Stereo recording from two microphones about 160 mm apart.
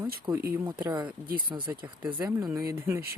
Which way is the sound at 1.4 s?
30° right (ahead or behind).